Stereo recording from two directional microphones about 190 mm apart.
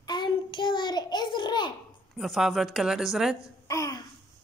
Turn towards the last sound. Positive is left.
turn(degrees=15)  # may be behind; listen again after turning